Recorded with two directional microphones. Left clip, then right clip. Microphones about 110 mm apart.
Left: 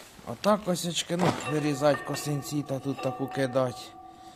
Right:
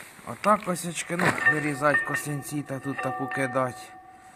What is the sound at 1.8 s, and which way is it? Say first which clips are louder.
Speech: right 2 dB; 5° left (ahead or behind).